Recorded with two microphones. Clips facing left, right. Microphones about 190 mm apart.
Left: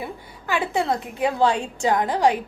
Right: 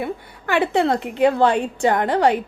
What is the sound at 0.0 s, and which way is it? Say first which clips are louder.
A woman's voice: right 6 dB; 60° right (ahead or behind).